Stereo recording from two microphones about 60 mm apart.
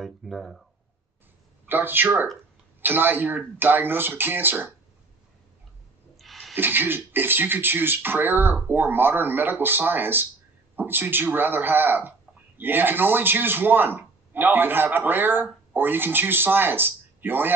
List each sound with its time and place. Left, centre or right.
0.0 s speech: centre
1.7 s speech: right
6.1 s rub: centre
6.5 s speech: right